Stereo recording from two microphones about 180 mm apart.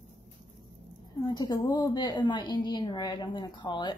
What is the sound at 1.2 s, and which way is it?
A woman's voice, 20° left (ahead or behind).